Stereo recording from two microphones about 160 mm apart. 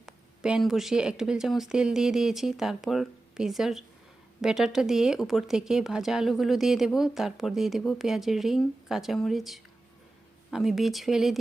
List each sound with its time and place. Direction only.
0.0 s speech: 5° right (ahead or behind)